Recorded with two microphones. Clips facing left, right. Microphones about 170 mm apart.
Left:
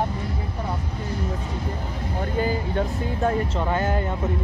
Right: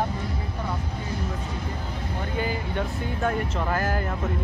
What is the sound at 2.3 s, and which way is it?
Speech, 40° left (ahead or behind).